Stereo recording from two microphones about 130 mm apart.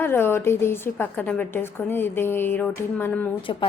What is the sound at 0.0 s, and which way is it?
A woman's voice, 15° left (ahead or behind).